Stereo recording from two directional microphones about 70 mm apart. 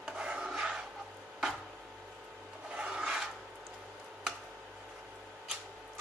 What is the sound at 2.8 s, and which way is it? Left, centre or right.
Rub, centre.